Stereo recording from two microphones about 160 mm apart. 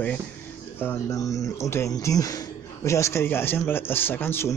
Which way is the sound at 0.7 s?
15° left (ahead or behind).